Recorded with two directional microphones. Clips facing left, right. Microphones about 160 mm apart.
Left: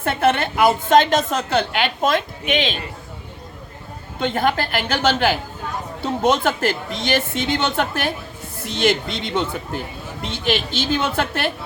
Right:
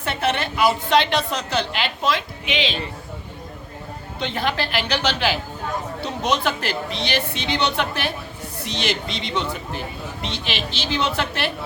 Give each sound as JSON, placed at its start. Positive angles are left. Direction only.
{"t": 0.0, "sound": "speech", "side_deg": 50}
{"t": 4.2, "sound": "speech", "side_deg": 50}